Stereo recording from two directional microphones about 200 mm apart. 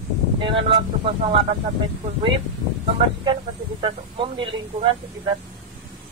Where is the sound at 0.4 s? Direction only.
25° right (ahead or behind).